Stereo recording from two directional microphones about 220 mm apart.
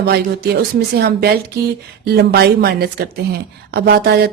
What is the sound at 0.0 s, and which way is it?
Speech, 45° right (ahead or behind).